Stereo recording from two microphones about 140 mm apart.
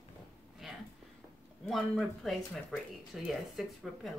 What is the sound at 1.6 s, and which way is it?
Speech, centre (ahead or behind).